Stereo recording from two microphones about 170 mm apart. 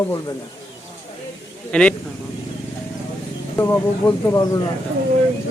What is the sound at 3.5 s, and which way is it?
Speech, 15° left (ahead or behind).